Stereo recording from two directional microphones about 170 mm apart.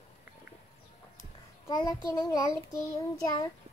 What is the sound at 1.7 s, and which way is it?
Child singing, 25° left (ahead or behind).